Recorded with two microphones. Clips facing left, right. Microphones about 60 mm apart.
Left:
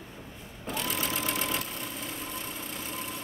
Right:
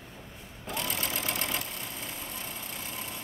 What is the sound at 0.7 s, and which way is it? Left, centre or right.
Sewing machine, centre.